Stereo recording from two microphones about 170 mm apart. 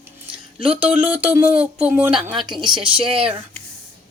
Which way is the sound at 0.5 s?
30° right (ahead or behind).